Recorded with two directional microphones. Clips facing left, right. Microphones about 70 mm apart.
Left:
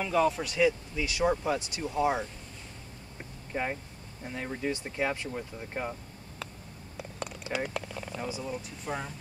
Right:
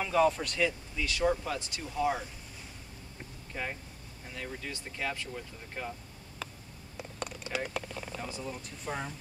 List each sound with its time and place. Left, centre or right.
0.0 s speech: centre; by 2.2 s left
3.5 s speech: left
6.4 s a sound: centre
7.0 s speech: centre